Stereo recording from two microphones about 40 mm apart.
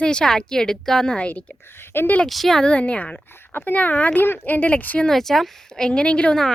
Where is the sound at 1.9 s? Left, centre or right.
Left.